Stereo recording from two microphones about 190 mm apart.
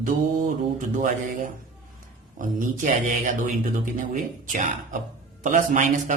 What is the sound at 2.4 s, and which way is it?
A man's voice, 45° right (ahead or behind).